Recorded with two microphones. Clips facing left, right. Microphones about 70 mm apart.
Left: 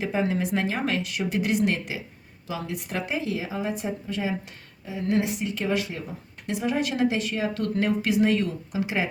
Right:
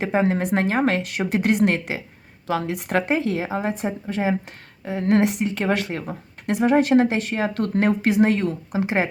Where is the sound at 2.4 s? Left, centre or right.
Right.